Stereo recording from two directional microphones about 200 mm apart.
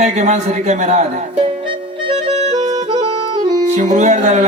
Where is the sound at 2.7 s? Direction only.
20° right (ahead or behind).